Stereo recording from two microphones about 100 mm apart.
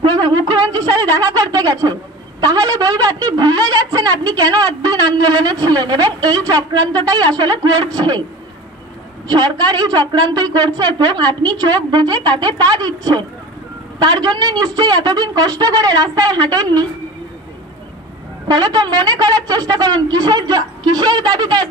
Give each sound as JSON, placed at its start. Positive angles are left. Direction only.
{"t": 0.0, "sound": "a woman's voice", "side_deg": -45}
{"t": 9.3, "sound": "a woman's voice", "side_deg": -45}
{"t": 18.5, "sound": "a woman's voice", "side_deg": -40}